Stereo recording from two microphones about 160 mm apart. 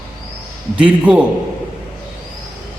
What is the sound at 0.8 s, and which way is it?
Speech, 10° right (ahead or behind).